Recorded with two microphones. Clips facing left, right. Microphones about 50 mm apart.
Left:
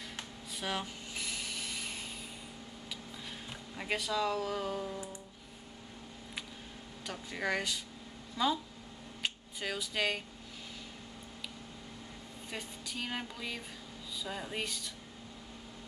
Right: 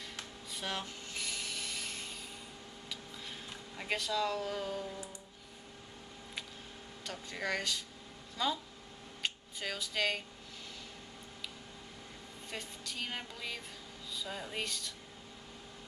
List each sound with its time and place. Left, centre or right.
0.5 s a sound: centre
7.1 s speech: centre
12.4 s speech: centre